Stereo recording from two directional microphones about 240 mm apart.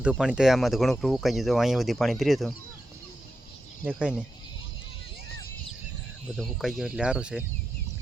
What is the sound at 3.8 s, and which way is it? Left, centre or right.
Speech, centre.